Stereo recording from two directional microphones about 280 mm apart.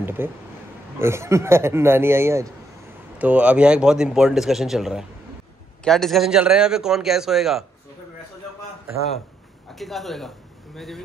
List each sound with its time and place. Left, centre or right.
0.0 s a man's voice: centre
9.8 s a man's voice: centre